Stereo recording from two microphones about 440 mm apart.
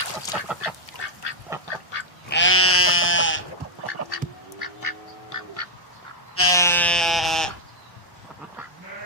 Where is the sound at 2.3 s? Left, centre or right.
Left.